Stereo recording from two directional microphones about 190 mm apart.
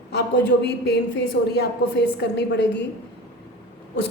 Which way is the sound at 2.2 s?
65° left (ahead or behind).